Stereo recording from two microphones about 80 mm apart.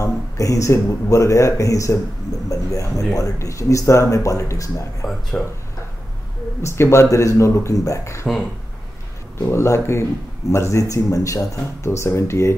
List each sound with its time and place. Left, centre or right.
0.0 s speech: left
5.3 s speech: centre
6.6 s speech: left
9.4 s speech: left